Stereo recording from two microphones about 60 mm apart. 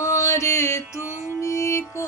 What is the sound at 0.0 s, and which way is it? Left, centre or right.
Music, left.